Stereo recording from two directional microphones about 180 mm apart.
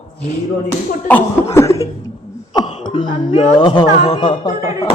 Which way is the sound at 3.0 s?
45° left (ahead or behind).